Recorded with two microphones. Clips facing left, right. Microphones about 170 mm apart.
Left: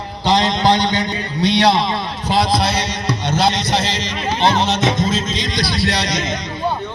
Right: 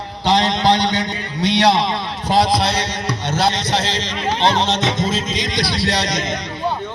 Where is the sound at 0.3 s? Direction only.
65° right (ahead or behind).